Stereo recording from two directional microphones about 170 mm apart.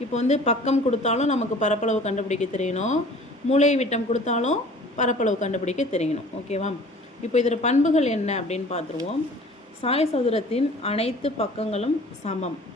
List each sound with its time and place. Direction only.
0.1 s a woman's voice: 40° left (ahead or behind)
9.8 s a woman's voice: 35° left (ahead or behind)